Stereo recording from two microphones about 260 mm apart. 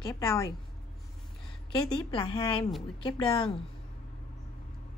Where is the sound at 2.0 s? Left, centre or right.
Centre.